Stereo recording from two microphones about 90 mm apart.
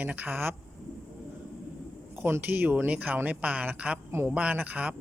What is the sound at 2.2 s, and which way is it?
A woman's voice, 25° right (ahead or behind).